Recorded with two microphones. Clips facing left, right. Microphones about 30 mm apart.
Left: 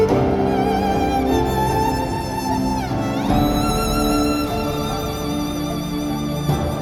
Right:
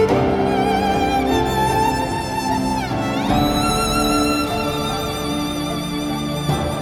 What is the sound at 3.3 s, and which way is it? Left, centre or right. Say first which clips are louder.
Violin: right 1 dB; centre.